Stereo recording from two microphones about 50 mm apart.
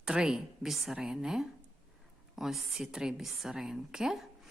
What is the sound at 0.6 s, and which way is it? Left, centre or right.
A woman's voice, centre.